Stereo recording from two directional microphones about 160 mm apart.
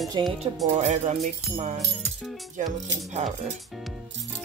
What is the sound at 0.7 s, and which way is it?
Speech, 45° right (ahead or behind).